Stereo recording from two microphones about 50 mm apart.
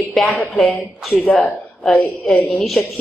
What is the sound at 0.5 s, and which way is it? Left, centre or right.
Speech, left.